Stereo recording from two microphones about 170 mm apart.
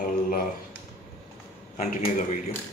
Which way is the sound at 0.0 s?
50° left (ahead or behind).